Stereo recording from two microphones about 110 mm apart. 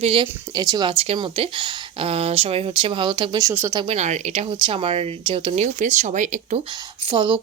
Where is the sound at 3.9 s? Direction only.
90° right.